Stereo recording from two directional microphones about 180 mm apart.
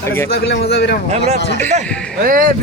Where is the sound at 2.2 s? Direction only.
50° right (ahead or behind).